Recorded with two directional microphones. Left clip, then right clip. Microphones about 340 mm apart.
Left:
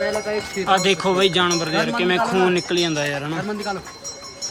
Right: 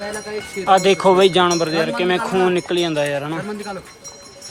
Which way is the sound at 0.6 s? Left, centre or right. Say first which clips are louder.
Right 5 dB; centre.